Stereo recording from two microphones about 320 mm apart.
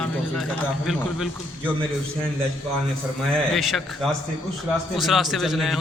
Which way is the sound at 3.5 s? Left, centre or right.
Centre.